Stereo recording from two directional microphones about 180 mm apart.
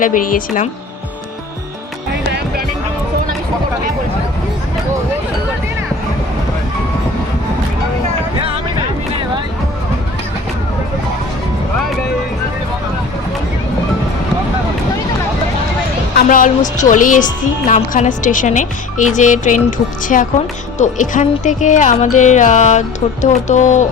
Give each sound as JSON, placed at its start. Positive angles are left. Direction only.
{"t": 0.0, "sound": "music", "side_deg": 45}
{"t": 16.1, "sound": "music", "side_deg": 45}